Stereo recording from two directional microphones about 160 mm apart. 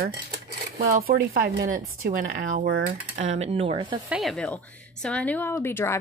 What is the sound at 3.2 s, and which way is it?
Speech, 45° right (ahead or behind).